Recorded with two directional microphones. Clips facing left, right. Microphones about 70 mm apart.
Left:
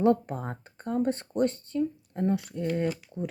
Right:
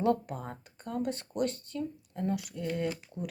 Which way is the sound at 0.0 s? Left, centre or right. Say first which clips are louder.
Left 5 dB; left.